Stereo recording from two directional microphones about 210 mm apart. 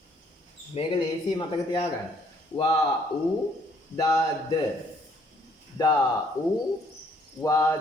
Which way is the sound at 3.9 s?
15° left (ahead or behind).